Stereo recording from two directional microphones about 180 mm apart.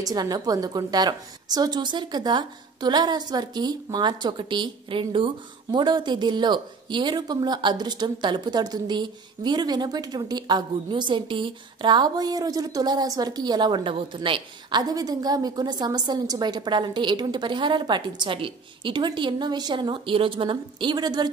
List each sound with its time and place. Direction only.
0.0 s a woman's voice: 20° right (ahead or behind)